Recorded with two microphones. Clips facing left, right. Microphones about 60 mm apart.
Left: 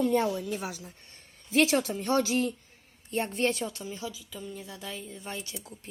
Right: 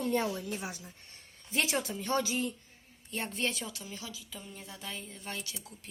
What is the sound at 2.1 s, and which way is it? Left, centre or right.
Speech, left.